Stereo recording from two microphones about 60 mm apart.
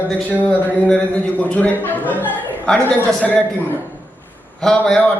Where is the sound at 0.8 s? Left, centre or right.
Centre.